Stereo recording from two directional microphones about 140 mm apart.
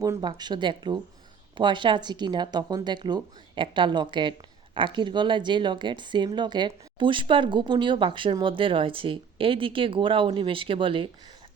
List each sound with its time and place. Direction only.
0.0 s speech: 30° right (ahead or behind)